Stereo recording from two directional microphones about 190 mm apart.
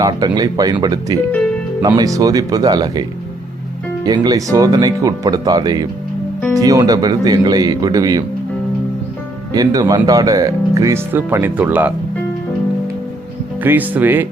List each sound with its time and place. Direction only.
0.3 s speech: 20° right (ahead or behind)
4.0 s speech: 20° right (ahead or behind)
9.5 s speech: 20° right (ahead or behind)
13.6 s speech: 10° right (ahead or behind)